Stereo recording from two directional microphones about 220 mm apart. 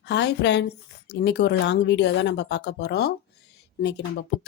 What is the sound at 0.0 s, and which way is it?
Speech, 50° left (ahead or behind).